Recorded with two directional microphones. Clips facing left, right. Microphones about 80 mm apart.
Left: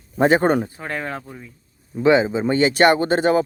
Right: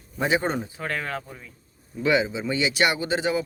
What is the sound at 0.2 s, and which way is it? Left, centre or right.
Speech, left.